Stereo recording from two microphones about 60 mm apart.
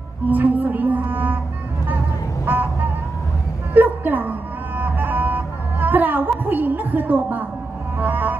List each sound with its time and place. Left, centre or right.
0.3 s cello: right
2.4 s a sound: right
3.7 s music: right